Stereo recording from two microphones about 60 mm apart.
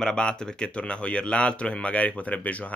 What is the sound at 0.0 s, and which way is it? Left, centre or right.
Speech, centre.